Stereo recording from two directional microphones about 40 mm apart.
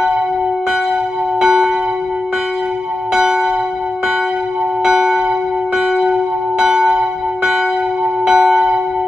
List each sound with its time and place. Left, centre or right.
1.4 s church bell: centre
4.8 s church bell: centre
6.6 s church bell: centre